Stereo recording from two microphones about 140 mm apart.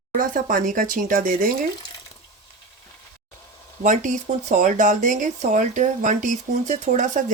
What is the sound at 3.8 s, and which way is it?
Speech, 65° right (ahead or behind).